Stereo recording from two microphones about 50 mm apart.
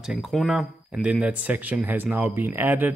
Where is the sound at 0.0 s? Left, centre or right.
Centre.